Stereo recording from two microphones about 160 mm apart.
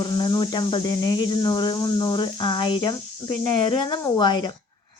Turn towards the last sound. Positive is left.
turn(degrees=25)  # may be behind; listen again after turning